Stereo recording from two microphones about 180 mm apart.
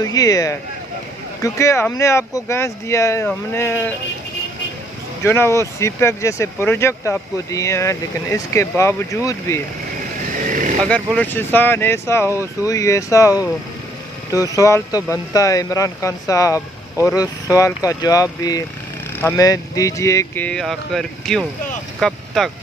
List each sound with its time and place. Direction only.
0.0 s speech: 20° left (ahead or behind)
5.2 s speech: 15° left (ahead or behind)
10.4 s speech: 50° right (ahead or behind)
11.1 s speech: 10° left (ahead or behind)
14.3 s speech: 20° left (ahead or behind); by 22.5 s centre (ahead or behind)